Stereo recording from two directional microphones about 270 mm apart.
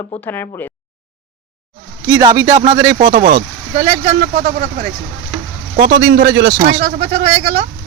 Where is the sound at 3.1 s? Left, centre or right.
Right.